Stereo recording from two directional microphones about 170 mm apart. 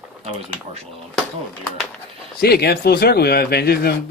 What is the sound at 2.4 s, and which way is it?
Speech, 70° left (ahead or behind).